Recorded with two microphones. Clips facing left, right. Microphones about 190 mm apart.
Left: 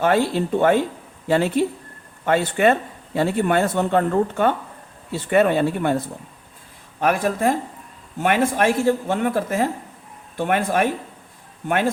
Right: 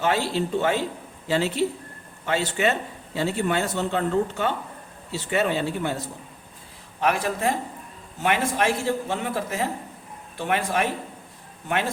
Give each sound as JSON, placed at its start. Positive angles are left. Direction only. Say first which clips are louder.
{"t": 0.0, "sound": "speech", "louder": "left 5 dB", "side_deg": 50}
{"t": 7.0, "sound": "speech", "louder": "left 4 dB", "side_deg": 50}